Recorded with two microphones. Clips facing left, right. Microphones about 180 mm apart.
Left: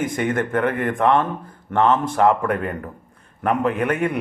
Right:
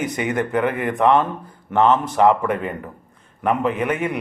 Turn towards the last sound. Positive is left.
turn(degrees=0)  # may be behind; listen again after turning